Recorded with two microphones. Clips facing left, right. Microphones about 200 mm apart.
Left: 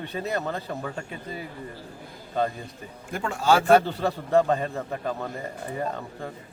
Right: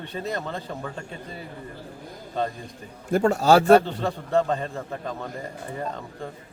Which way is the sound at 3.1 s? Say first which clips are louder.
Right 5 dB; 40° right (ahead or behind).